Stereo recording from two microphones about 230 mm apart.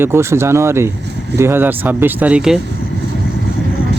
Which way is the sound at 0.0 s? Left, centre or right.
Centre.